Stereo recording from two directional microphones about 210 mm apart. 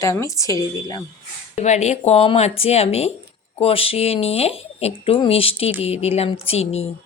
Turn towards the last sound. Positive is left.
turn(degrees=30)  # may be behind; listen again after turning